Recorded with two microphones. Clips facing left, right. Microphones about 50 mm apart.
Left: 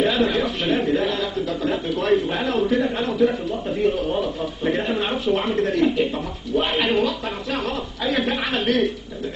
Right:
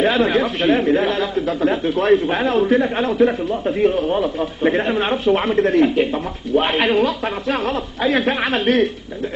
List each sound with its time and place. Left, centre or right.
0.0 s a man's voice: right